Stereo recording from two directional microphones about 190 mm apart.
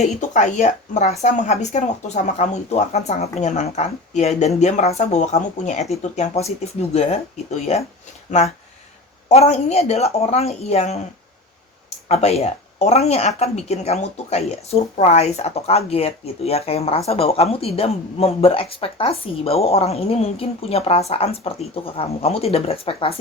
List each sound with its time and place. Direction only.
0.0 s speech: 40° left (ahead or behind)
9.3 s speech: 35° left (ahead or behind)
12.0 s speech: 35° left (ahead or behind)